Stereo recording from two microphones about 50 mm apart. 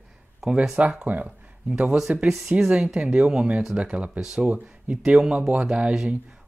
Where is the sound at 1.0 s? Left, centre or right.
Right.